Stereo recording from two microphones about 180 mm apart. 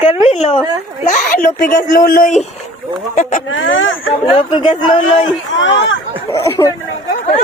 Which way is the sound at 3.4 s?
90° left.